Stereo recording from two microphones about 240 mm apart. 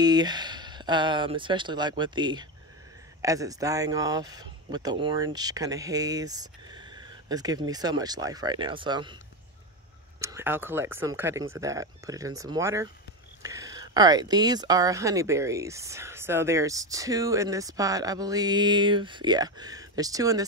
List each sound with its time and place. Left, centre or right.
0.0 s speech: centre
10.2 s speech: centre